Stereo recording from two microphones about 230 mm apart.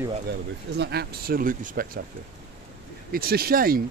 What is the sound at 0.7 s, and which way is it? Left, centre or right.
Speech, right.